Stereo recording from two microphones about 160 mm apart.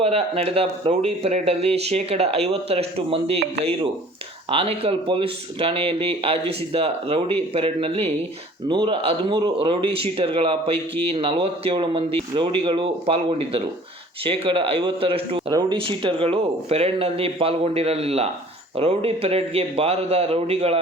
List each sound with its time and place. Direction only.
0.0 s speech: 40° right (ahead or behind)
4.4 s speech: 35° right (ahead or behind)